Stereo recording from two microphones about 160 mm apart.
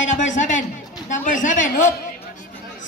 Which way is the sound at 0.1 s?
50° left (ahead or behind).